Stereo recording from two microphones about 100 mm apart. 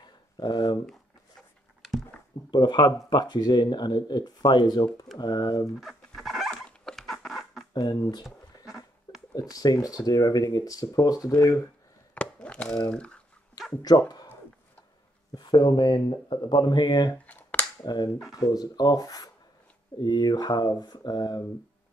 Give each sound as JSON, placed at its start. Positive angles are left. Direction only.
{"t": 0.4, "sound": "speech", "side_deg": 45}
{"t": 2.5, "sound": "speech", "side_deg": 50}
{"t": 5.8, "sound": "chicken", "side_deg": 0}
{"t": 6.5, "sound": "dog", "side_deg": 5}
{"t": 7.7, "sound": "speech", "side_deg": 45}
{"t": 9.3, "sound": "speech", "side_deg": 40}
{"t": 12.1, "sound": "a sound", "side_deg": 15}
{"t": 12.9, "sound": "speech", "side_deg": 10}
{"t": 13.8, "sound": "speech", "side_deg": 40}
{"t": 15.3, "sound": "speech", "side_deg": 50}
{"t": 17.3, "sound": "finger snapping", "side_deg": 15}
{"t": 17.7, "sound": "cap gun", "side_deg": 45}
{"t": 18.3, "sound": "speech", "side_deg": 40}